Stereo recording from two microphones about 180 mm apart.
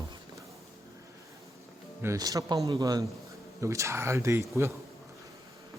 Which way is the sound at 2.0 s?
15° right (ahead or behind).